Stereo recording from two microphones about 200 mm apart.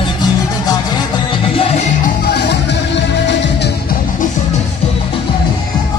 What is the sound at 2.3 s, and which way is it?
Music, 60° left (ahead or behind).